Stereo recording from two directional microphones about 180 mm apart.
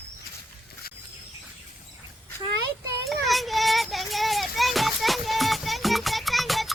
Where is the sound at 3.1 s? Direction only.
Centre (ahead or behind).